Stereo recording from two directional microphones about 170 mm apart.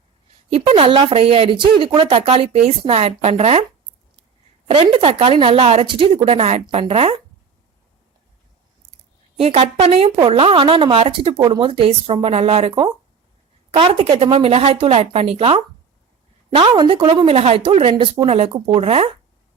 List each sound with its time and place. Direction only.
0.5 s a woman's voice: 35° right (ahead or behind)
4.7 s a woman's voice: 30° right (ahead or behind)
9.4 s a woman's voice: 40° right (ahead or behind)